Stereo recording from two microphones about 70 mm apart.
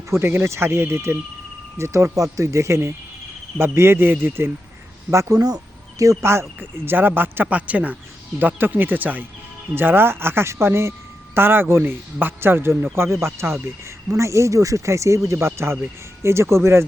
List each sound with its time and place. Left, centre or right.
0.1 s a man's voice: right
6.0 s speech: right
6.6 s a man's voice: right
7.4 s a man's voice: centre; by 16.8 s right